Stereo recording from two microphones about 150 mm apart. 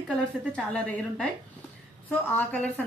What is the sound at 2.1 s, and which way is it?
Speech, 10° left (ahead or behind).